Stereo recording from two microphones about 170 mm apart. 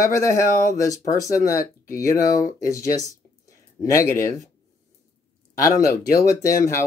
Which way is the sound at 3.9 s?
20° left (ahead or behind).